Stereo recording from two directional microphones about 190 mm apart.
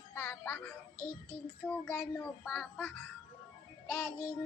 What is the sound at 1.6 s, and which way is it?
A man's voice, 5° left (ahead or behind).